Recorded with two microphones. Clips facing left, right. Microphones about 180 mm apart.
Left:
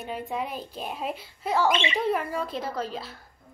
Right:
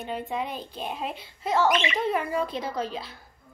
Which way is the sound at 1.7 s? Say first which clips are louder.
Right 1 dB; 30° left (ahead or behind).